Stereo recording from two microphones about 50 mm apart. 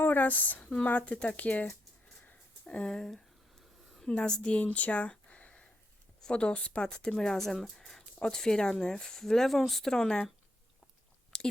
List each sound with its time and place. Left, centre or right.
0.0 s speech: left
2.6 s speech: left
4.3 s speech: left; by 9.9 s centre
9.9 s speech: centre
11.3 s a sound: centre